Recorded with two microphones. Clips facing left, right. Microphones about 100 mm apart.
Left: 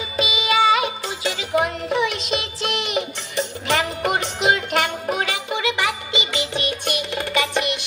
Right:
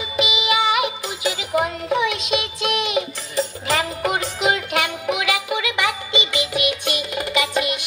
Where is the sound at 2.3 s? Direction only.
50° left (ahead or behind).